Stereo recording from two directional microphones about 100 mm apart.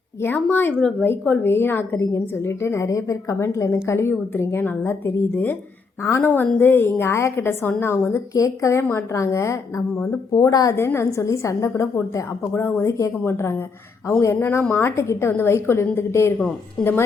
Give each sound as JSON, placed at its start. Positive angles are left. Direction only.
{"t": 0.3, "sound": "a woman's voice", "side_deg": 15}
{"t": 10.3, "sound": "a woman's voice", "side_deg": 40}